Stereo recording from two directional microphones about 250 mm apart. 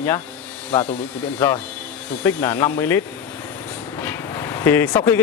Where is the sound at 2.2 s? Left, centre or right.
Centre.